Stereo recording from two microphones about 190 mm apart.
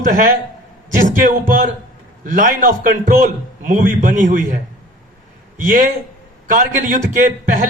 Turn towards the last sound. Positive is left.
turn(degrees=-45)  # may be behind; listen again after turning